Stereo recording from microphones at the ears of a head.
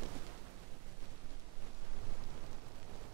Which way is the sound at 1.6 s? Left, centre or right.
Right.